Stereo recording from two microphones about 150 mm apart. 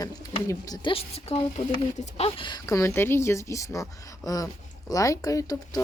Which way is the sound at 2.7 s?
20° left (ahead or behind).